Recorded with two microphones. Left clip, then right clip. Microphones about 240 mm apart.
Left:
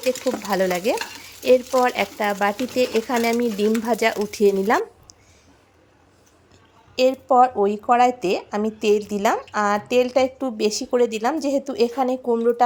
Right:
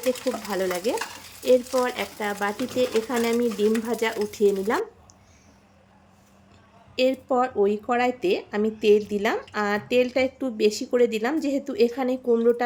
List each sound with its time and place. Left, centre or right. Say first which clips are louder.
0.0 s speech: left 3 dB; left
6.9 s speech: left 6 dB; centre